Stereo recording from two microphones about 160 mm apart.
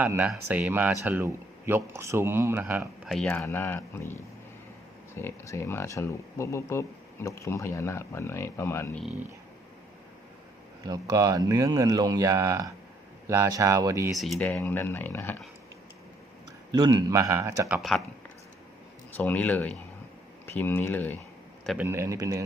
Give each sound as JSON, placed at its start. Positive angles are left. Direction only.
{"t": 0.0, "sound": "speech", "side_deg": -10}
{"t": 3.2, "sound": "speech", "side_deg": 10}
{"t": 10.8, "sound": "speech", "side_deg": -20}
{"t": 14.2, "sound": "speech", "side_deg": 5}
{"t": 16.7, "sound": "speech", "side_deg": -25}
{"t": 17.7, "sound": "speech", "side_deg": 0}
{"t": 19.1, "sound": "speech", "side_deg": 10}
{"t": 21.8, "sound": "speech", "side_deg": -15}